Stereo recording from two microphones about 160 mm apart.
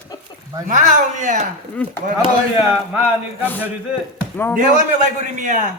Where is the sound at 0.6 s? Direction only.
55° right (ahead or behind).